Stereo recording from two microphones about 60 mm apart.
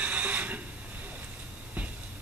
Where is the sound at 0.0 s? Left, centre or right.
Right.